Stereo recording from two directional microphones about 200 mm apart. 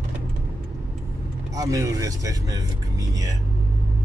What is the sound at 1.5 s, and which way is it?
Speech, 15° right (ahead or behind).